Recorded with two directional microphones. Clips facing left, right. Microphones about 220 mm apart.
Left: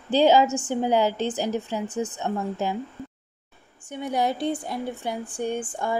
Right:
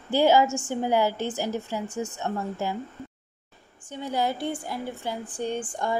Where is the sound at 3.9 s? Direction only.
15° left (ahead or behind).